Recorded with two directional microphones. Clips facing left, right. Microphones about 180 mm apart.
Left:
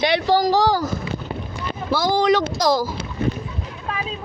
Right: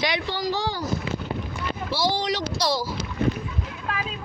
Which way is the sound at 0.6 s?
90° left.